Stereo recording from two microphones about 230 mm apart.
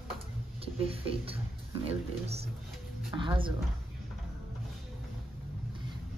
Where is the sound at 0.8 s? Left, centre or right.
Right.